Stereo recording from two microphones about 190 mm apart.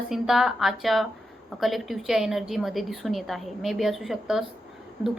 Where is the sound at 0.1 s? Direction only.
Centre (ahead or behind).